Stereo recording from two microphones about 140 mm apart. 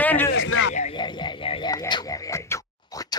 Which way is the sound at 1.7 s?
30° left (ahead or behind).